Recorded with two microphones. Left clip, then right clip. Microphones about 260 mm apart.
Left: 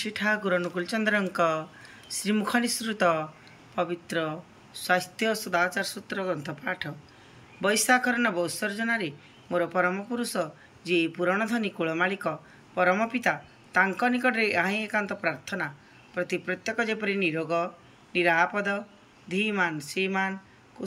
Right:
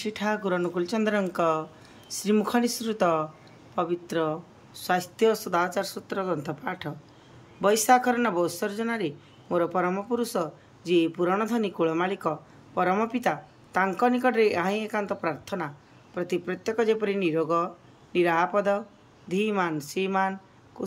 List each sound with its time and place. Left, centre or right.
0.0 s a man's voice: centre